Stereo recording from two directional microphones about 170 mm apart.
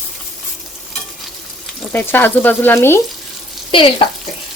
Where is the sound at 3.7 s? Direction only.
30° left (ahead or behind).